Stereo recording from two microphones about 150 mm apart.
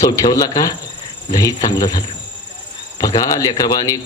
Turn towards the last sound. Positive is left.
turn(degrees=25)  # may be behind; listen again after turning